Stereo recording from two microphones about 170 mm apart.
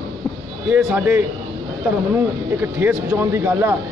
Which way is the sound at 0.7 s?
10° right (ahead or behind).